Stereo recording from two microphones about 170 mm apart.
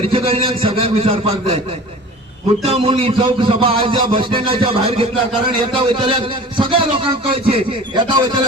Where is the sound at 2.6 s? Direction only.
35° right (ahead or behind).